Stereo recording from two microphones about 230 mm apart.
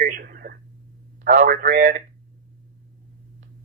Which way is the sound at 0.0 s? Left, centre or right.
Right.